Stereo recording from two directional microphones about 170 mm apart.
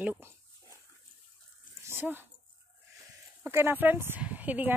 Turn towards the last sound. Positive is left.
turn(degrees=-10)  # may be behind; listen again after turning